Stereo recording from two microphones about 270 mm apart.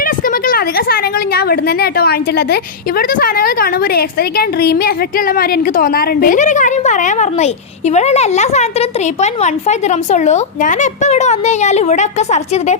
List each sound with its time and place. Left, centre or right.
0.0 s a woman's voice: left